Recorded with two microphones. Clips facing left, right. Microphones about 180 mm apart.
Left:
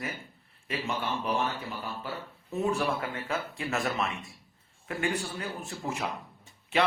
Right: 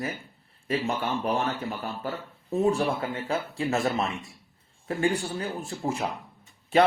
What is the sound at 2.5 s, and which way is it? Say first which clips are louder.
Speech: right 5 dB; 30° right (ahead or behind).